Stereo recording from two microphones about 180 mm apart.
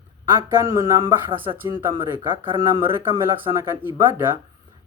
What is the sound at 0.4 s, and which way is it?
Speech, 15° right (ahead or behind).